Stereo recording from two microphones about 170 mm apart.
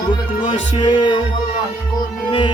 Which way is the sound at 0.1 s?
30° left (ahead or behind).